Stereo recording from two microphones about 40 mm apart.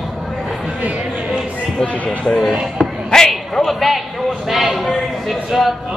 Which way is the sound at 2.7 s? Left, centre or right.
Centre.